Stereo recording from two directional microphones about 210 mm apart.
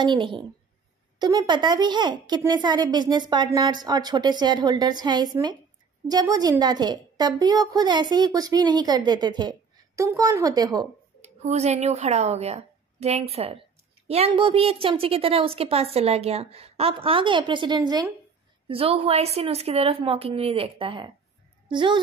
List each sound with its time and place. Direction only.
0.0 s a woman's voice: 20° right (ahead or behind)
11.1 s a woman's voice: 30° right (ahead or behind)